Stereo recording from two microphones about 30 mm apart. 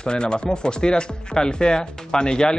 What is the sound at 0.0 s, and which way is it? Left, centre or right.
Speech, left.